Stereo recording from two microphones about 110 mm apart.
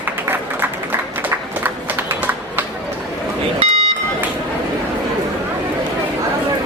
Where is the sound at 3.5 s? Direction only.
65° right (ahead or behind).